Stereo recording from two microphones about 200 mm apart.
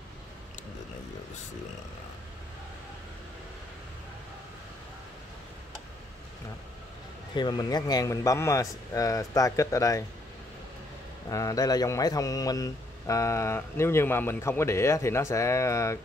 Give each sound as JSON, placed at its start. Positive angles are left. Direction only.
{"t": 7.3, "sound": "a man's voice", "side_deg": 20}
{"t": 11.2, "sound": "a man's voice", "side_deg": 15}